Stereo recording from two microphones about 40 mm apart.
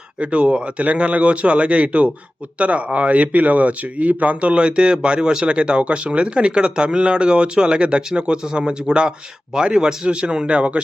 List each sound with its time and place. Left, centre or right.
0.2 s speech: right